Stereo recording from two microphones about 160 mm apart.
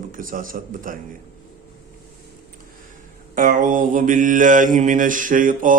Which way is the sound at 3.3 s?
55° right (ahead or behind).